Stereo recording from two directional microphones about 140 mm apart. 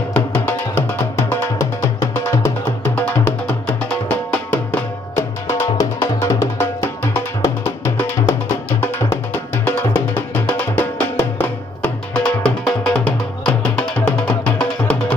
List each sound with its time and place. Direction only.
0.1 s music: 15° left (ahead or behind)